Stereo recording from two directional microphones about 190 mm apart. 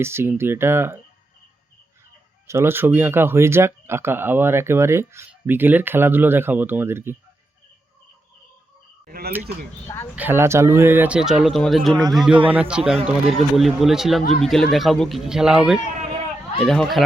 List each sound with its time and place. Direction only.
0.0 s speech: 15° right (ahead or behind)
2.5 s speech: 15° right (ahead or behind)
9.0 s speech: 50° right (ahead or behind)
10.2 s speech: 10° right (ahead or behind)